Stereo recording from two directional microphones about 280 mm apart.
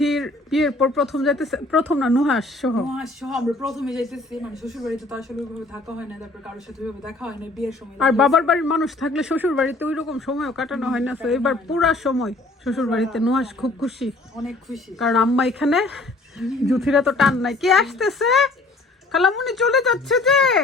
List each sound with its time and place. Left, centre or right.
0.0 s speech: centre
6.8 s speech: centre